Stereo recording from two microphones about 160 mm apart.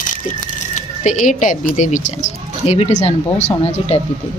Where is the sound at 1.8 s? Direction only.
50° left (ahead or behind).